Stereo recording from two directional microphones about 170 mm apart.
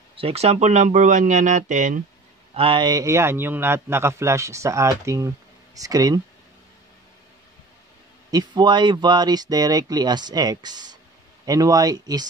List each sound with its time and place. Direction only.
0.1 s speech: 35° right (ahead or behind)
2.5 s a man's voice: 30° right (ahead or behind)
8.3 s speech: 25° right (ahead or behind)